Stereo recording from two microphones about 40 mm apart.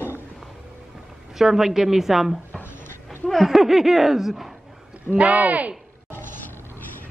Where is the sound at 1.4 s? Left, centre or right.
Centre.